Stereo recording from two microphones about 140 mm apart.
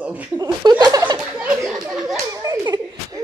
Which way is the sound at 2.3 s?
25° right (ahead or behind).